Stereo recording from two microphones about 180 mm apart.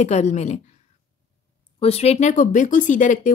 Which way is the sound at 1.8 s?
35° left (ahead or behind).